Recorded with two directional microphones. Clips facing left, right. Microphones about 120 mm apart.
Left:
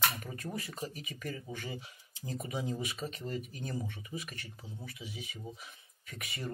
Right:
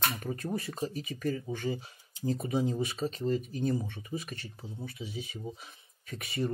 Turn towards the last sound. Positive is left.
turn(degrees=-30)  # may be behind; listen again after turning